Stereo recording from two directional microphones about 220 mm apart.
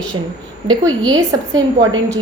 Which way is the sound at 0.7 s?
15° right (ahead or behind).